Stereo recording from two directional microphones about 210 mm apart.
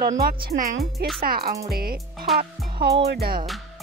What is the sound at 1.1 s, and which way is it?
A woman's voice, 45° right (ahead or behind).